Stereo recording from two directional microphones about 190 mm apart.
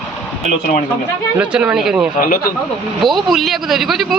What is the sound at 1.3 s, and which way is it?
Speech, 5° right (ahead or behind).